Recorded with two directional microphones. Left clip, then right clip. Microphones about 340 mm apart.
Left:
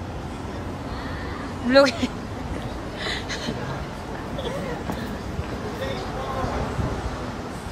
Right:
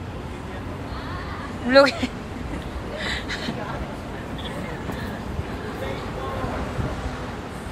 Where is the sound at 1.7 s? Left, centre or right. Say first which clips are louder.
Right 1 dB; centre.